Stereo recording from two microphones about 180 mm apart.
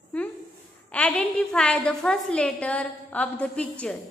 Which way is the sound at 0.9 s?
5° left (ahead or behind).